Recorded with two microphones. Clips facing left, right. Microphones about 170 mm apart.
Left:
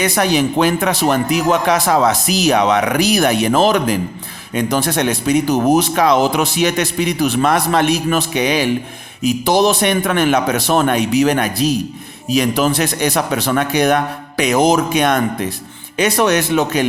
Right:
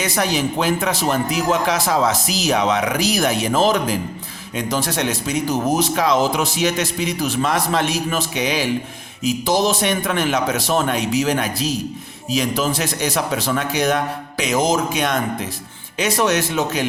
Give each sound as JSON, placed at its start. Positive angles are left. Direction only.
{"t": 0.0, "sound": "speech", "side_deg": 65}